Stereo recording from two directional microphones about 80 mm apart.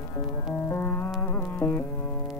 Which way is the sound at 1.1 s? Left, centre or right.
Left.